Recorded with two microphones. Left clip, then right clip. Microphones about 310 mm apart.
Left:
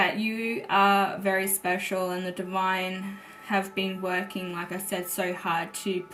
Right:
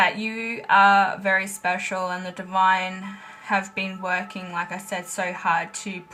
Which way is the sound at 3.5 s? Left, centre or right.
Right.